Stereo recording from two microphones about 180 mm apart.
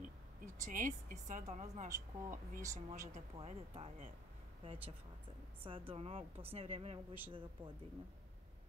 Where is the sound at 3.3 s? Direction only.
35° right (ahead or behind).